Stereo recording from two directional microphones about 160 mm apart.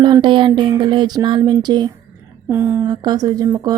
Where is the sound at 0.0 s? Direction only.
30° right (ahead or behind).